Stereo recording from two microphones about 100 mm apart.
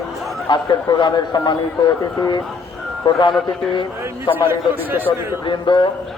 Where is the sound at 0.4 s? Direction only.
50° left (ahead or behind).